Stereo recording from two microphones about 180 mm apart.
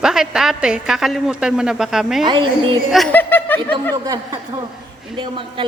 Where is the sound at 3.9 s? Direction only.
20° right (ahead or behind).